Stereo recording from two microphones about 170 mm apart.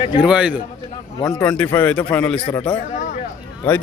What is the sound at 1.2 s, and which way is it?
A man's voice, 20° left (ahead or behind).